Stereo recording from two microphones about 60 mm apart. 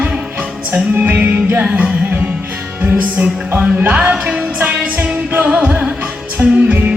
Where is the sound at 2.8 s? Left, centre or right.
Right.